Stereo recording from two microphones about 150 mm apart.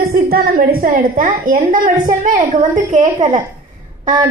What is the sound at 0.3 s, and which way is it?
Speech, 75° right (ahead or behind).